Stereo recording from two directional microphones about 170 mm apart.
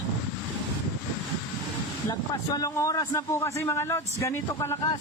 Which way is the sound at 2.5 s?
20° left (ahead or behind).